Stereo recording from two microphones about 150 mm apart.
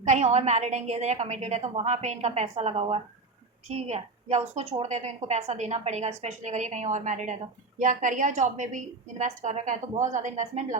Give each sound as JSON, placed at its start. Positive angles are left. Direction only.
{"t": 0.0, "sound": "a woman's voice", "side_deg": -50}